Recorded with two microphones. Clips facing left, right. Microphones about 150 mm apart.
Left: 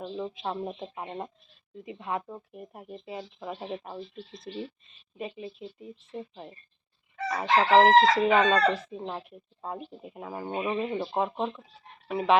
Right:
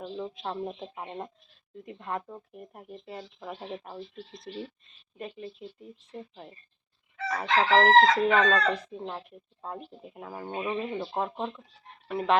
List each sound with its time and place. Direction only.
0.0 s speech: 5° left (ahead or behind)
11.3 s speech: centre (ahead or behind)